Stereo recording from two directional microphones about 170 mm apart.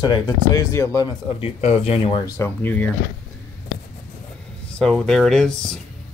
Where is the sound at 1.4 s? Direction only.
35° left (ahead or behind).